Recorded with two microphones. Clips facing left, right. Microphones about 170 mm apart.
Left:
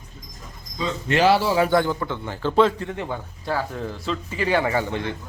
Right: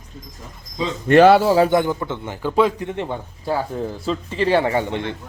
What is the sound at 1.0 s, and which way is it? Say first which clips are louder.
Speech: right 7 dB; 50° right (ahead or behind).